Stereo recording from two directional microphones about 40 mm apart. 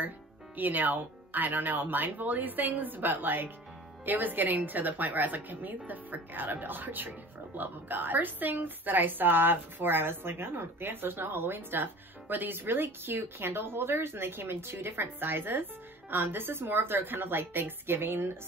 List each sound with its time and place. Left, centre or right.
0.6 s speech: right